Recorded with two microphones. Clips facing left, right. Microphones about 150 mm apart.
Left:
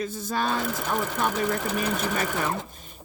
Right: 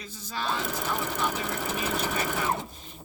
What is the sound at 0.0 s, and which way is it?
Speech, 50° left (ahead or behind).